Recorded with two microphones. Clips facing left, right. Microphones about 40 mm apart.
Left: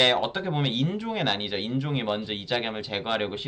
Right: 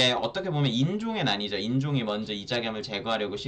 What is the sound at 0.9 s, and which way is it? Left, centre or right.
Speech, centre.